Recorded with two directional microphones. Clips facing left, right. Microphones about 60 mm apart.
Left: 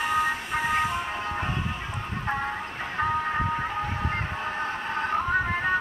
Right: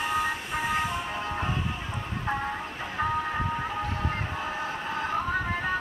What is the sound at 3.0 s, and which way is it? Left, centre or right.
Music, centre.